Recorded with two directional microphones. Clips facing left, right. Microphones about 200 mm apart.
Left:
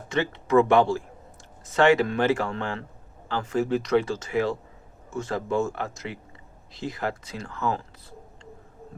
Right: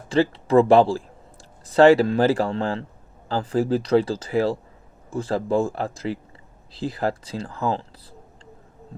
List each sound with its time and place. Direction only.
0.1 s speech: 30° right (ahead or behind)